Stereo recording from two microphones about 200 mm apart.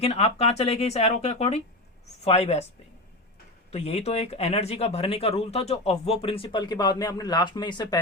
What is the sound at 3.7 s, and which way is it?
Speech, 30° left (ahead or behind).